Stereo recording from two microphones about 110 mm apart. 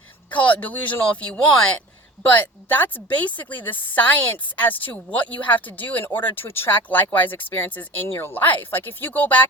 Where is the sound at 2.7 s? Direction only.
15° left (ahead or behind).